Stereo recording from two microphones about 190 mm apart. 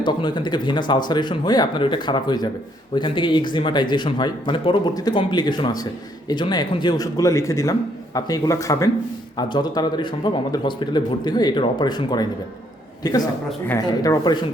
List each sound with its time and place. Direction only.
0.0 s a man's voice: 25° left (ahead or behind)